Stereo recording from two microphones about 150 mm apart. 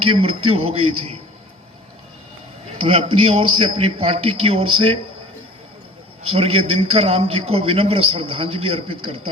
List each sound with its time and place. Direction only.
0.2 s a man's voice: 40° right (ahead or behind)
2.8 s a man's voice: 40° right (ahead or behind)
6.2 s a man's voice: 40° right (ahead or behind)